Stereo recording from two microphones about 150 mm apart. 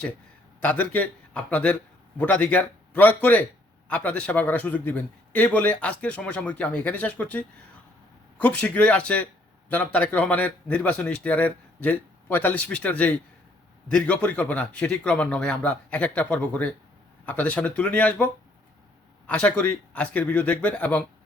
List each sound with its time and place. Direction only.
0.6 s a man's voice: 10° left (ahead or behind)
19.3 s a man's voice: 10° left (ahead or behind)